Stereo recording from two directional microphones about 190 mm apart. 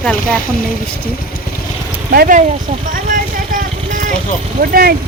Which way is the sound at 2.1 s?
50° right (ahead or behind).